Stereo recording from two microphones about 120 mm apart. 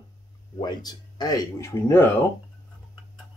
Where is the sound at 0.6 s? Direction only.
35° left (ahead or behind).